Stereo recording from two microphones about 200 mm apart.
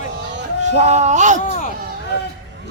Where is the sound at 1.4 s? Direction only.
40° left (ahead or behind).